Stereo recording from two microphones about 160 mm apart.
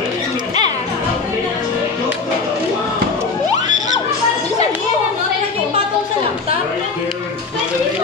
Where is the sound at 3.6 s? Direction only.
25° right (ahead or behind).